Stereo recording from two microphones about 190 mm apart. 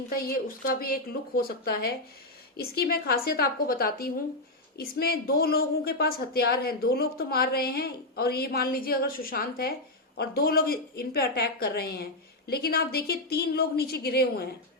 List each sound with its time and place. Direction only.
0.1 s a woman's voice: 50° left (ahead or behind)